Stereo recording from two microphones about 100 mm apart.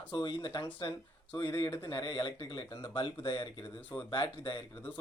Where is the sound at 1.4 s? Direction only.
30° left (ahead or behind).